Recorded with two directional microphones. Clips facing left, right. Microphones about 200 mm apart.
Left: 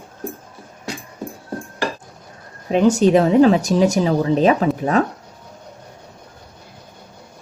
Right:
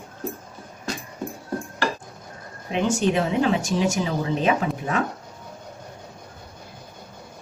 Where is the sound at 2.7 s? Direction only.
40° left (ahead or behind).